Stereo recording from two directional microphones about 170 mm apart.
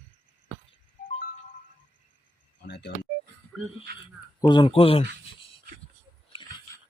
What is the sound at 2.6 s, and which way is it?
Telephone dialing, 75° left (ahead or behind).